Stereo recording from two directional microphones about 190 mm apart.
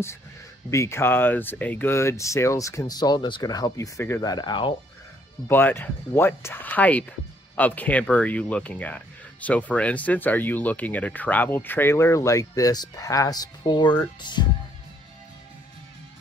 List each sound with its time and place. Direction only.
0.7 s speech: 15° left (ahead or behind)
5.5 s speech: 10° left (ahead or behind)